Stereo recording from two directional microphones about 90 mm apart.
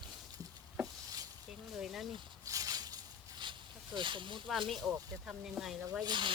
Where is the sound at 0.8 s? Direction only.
45° right (ahead or behind).